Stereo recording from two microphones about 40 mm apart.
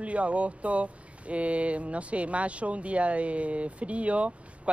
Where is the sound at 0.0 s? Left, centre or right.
Right.